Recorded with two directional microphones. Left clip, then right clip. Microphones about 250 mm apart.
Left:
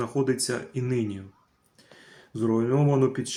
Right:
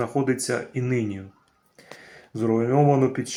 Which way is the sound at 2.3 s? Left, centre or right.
Centre.